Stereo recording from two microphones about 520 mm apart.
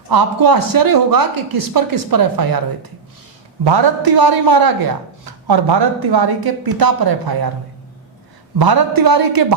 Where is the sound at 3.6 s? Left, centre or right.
Right.